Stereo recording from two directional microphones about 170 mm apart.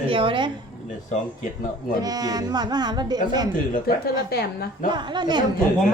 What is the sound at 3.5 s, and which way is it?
Speech, 55° left (ahead or behind).